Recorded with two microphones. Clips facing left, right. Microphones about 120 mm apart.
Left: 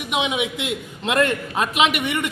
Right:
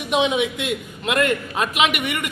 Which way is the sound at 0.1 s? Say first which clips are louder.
Right 4 dB; 15° left (ahead or behind).